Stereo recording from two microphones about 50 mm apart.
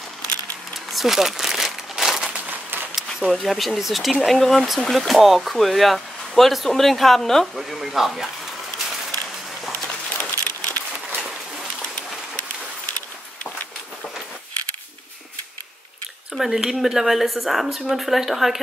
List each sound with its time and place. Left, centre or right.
0.9 s crumpling: centre
2.3 s a sound: right
3.1 s speech: centre
7.5 s speech: centre
10.1 s a sound: left
16.3 s speech: centre